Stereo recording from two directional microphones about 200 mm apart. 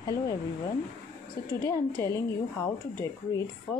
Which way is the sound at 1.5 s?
15° left (ahead or behind).